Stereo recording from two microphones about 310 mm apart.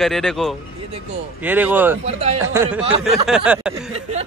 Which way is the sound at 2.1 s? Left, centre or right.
Right.